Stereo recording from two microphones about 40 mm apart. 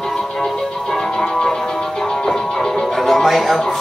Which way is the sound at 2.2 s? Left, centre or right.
Centre.